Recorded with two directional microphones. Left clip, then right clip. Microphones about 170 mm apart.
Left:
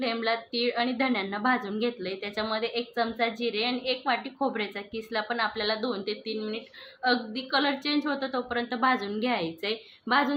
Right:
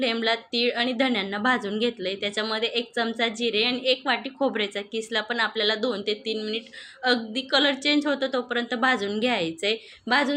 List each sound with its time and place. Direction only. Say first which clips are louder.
0.0 s a woman's voice: right 4 dB; 20° right (ahead or behind)